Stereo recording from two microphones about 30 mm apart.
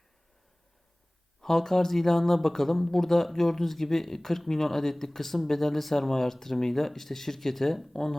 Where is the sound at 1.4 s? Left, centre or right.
Centre.